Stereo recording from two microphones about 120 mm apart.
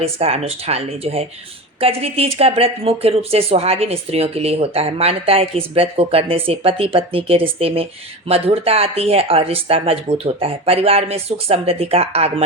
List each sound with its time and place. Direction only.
0.0 s speech: 55° right (ahead or behind)